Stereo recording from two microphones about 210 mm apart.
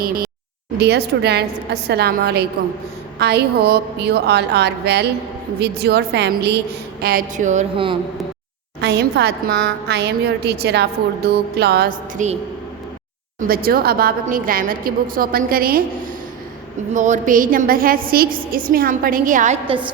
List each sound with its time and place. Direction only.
0.0 s a woman's voice: 45° right (ahead or behind); by 7.9 s 30° right (ahead or behind)
8.8 s a woman's voice: 55° right (ahead or behind); by 12.4 s 35° right (ahead or behind)
13.5 s a woman's voice: 45° right (ahead or behind)
16.9 s a woman's voice: 35° right (ahead or behind)